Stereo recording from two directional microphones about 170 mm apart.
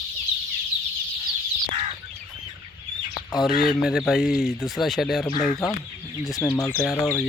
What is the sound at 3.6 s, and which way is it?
Speech, centre (ahead or behind).